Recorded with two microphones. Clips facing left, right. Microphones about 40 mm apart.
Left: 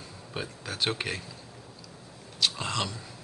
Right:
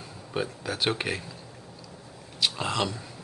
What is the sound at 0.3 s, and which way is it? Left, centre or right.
Speech, centre.